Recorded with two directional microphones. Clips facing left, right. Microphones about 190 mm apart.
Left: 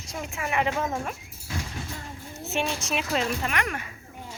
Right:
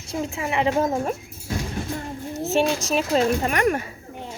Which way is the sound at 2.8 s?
40° right (ahead or behind).